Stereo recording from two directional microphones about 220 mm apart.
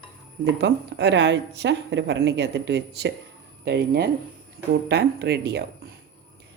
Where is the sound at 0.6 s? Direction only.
50° right (ahead or behind).